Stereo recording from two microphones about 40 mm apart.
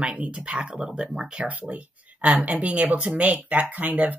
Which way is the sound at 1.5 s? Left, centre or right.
Right.